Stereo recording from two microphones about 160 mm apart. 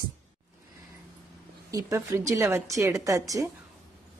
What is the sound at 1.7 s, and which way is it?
A woman's voice, 20° right (ahead or behind).